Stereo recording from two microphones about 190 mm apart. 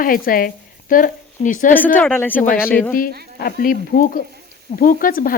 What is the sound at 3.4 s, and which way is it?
Speech, 50° left (ahead or behind).